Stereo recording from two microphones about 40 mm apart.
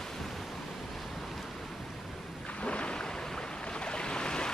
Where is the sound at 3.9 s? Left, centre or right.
Left.